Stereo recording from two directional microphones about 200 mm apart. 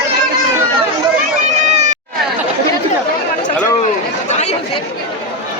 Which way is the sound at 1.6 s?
35° right (ahead or behind).